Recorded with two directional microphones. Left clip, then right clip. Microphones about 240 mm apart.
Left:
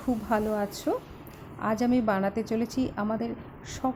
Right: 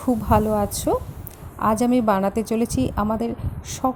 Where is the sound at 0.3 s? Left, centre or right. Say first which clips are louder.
Right 8 dB; centre.